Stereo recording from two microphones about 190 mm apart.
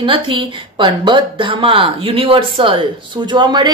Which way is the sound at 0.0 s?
25° right (ahead or behind).